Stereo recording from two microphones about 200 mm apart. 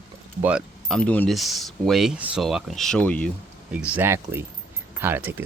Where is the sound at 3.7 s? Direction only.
5° right (ahead or behind).